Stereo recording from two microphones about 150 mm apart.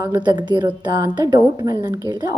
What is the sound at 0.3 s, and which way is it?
A woman's voice, 30° right (ahead or behind).